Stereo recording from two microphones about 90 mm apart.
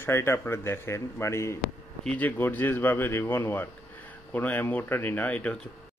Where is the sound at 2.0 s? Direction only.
15° left (ahead or behind).